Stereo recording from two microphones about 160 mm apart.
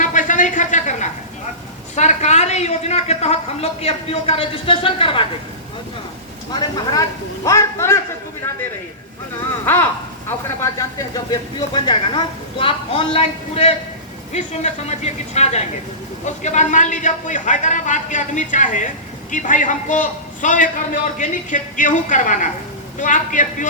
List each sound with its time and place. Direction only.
0.0 s a sound: 55° left (ahead or behind)
2.0 s speech: 45° left (ahead or behind)
6.5 s a man's voice: 25° left (ahead or behind)
10.2 s a man's voice: 20° left (ahead or behind); by 23.6 s 55° left (ahead or behind)